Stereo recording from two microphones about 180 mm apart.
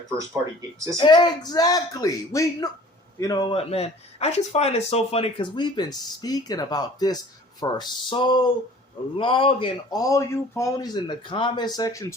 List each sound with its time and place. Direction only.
0.9 s speech: 25° left (ahead or behind)